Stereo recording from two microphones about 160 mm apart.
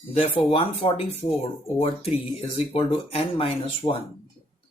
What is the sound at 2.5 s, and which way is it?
Speech, 35° left (ahead or behind).